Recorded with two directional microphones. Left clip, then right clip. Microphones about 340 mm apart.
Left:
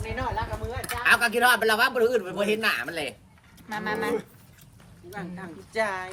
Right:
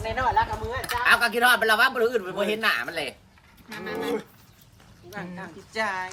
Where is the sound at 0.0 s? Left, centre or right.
Right.